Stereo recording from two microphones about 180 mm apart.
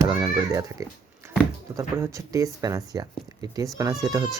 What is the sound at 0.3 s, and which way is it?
Speech, 15° right (ahead or behind).